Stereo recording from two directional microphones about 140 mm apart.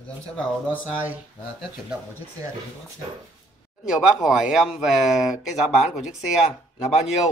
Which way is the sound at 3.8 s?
5° right (ahead or behind).